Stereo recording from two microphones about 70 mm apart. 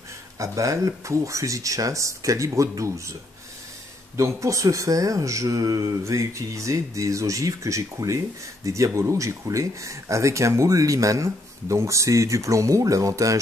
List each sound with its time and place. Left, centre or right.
0.4 s speech: right
4.4 s speech: right